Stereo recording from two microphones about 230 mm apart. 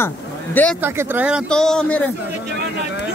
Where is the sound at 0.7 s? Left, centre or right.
Centre.